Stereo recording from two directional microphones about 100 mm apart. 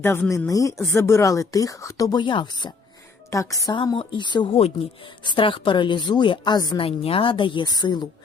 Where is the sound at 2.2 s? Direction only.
55° left (ahead or behind).